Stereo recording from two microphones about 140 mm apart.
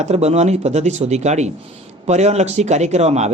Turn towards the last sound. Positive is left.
turn(degrees=-50)  # may be behind; listen again after turning